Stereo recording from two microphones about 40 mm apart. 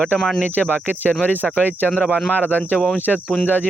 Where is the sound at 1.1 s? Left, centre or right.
Left.